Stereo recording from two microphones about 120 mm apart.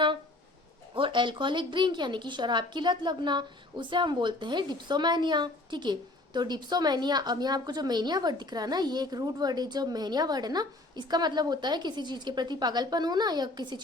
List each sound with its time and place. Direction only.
0.9 s a woman's voice: 40° right (ahead or behind)